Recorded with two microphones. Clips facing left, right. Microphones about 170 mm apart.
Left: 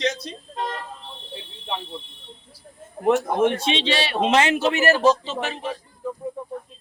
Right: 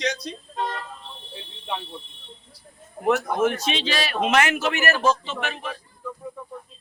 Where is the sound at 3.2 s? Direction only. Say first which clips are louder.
Left 2 dB; 30° left (ahead or behind).